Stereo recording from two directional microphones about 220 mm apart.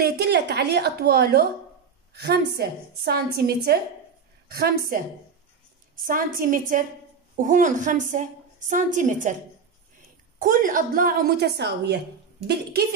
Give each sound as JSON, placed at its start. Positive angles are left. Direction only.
{"t": 0.0, "sound": "a woman's voice", "side_deg": -45}
{"t": 10.4, "sound": "a woman's voice", "side_deg": -40}